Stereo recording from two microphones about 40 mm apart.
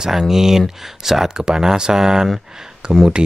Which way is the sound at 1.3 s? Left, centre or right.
Centre.